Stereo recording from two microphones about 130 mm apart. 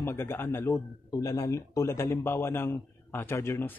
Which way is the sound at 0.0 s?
20° left (ahead or behind).